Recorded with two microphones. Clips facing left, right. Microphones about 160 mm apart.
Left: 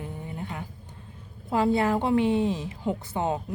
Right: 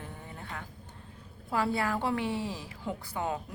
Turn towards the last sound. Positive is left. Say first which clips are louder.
# left 6 dB
turn(degrees=25)  # may be behind; listen again after turning